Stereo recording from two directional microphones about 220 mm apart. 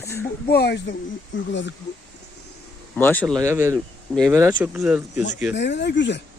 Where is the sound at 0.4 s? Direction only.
45° left (ahead or behind).